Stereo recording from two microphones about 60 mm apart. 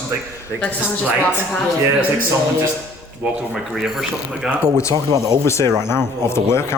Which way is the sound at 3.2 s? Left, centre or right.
Centre.